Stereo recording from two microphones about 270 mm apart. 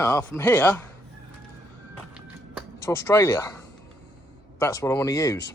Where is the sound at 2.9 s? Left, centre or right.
Centre.